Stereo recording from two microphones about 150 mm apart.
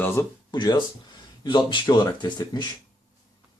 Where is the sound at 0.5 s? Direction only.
30° left (ahead or behind).